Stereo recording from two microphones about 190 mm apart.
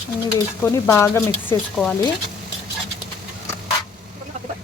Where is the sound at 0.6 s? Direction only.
15° left (ahead or behind).